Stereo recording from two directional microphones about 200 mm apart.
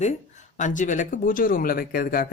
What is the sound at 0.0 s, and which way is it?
Speech, 35° left (ahead or behind).